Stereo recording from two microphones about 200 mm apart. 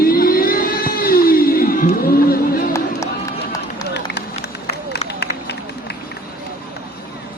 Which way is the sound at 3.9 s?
55° left (ahead or behind).